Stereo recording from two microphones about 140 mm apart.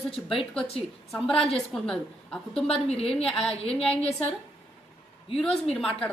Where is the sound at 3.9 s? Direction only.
45° left (ahead or behind).